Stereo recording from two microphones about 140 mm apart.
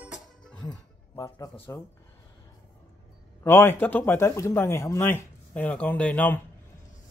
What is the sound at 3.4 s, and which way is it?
Speech, 15° left (ahead or behind).